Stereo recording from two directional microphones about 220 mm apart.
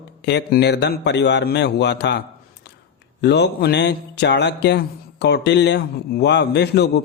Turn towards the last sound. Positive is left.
turn(degrees=50)  # may be behind; listen again after turning